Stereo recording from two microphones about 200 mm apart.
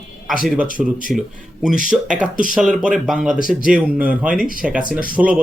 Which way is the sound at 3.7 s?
5° right (ahead or behind).